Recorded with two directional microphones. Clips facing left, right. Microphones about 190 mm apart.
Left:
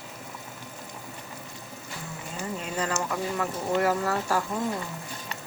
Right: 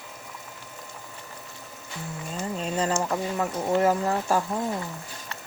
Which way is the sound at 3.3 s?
20° right (ahead or behind).